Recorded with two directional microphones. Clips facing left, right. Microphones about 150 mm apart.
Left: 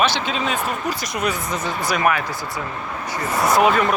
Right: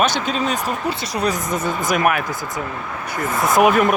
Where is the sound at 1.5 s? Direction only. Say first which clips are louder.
Right 3 dB; 50° right (ahead or behind).